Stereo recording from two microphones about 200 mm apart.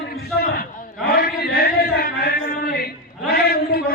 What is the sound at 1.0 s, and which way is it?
Chant, 50° left (ahead or behind).